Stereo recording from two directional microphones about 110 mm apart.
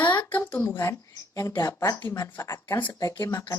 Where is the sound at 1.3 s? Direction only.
30° left (ahead or behind).